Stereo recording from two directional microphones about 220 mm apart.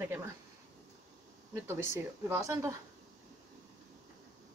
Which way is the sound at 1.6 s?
10° right (ahead or behind).